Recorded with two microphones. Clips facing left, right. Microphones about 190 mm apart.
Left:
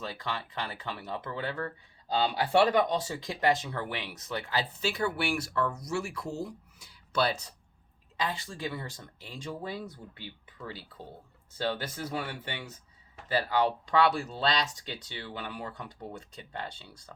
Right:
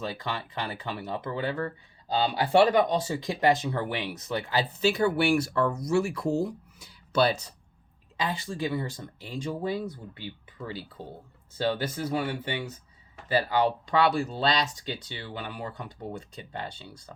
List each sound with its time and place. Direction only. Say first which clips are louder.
0.0 s speech: right 3 dB; 15° right (ahead or behind)
5.1 s speech: right 7 dB; 35° right (ahead or behind)
7.1 s speech: right 5 dB; 20° right (ahead or behind)
11.5 s speech: right 5 dB; 5° right (ahead or behind)